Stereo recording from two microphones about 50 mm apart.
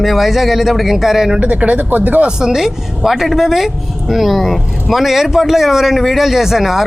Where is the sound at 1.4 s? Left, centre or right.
Right.